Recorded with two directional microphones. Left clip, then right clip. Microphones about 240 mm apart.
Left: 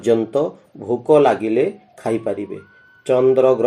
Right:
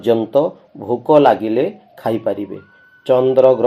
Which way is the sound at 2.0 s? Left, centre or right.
Centre.